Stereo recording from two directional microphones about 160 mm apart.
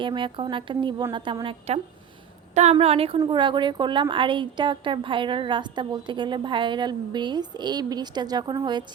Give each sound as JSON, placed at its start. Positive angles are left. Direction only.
{"t": 0.0, "sound": "a woman's voice", "side_deg": -30}